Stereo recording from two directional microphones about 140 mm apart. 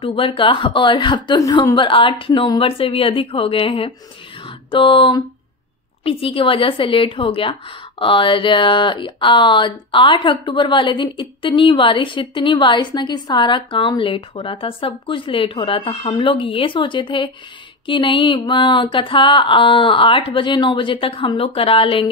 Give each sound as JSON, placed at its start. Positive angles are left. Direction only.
{"t": 0.0, "sound": "speech", "side_deg": 40}
{"t": 1.8, "sound": "speech", "side_deg": 35}